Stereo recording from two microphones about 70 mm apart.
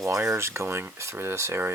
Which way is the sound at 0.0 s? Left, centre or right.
Right.